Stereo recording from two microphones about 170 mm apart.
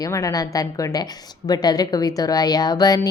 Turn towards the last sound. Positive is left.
turn(degrees=20)  # may be behind; listen again after turning